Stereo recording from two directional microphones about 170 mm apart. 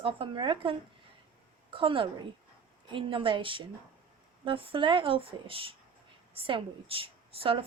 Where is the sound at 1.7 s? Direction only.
30° right (ahead or behind).